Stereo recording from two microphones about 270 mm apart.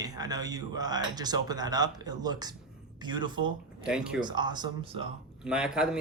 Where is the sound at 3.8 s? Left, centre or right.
Centre.